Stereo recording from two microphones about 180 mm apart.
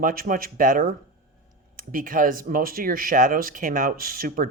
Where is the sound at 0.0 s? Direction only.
50° right (ahead or behind).